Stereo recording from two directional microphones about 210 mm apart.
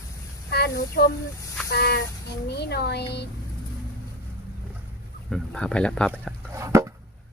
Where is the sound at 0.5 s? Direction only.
50° left (ahead or behind).